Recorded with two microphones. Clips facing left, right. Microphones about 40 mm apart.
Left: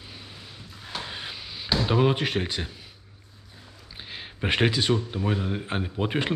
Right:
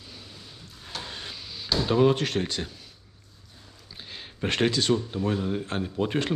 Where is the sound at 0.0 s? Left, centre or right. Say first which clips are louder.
Left 2 dB; left.